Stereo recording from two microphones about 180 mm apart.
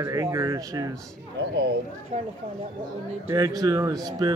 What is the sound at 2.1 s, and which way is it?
Speech, 40° right (ahead or behind).